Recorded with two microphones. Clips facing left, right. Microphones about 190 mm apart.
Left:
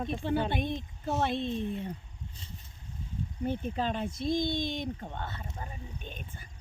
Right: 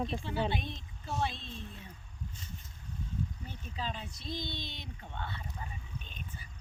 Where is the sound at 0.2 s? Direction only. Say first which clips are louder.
Left 5 dB; 55° left (ahead or behind).